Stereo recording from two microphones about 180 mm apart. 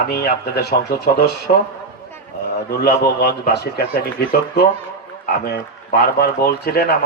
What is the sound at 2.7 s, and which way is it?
Speech, 60° left (ahead or behind).